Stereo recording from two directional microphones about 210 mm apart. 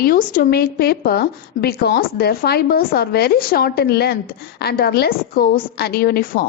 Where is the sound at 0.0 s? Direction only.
40° left (ahead or behind).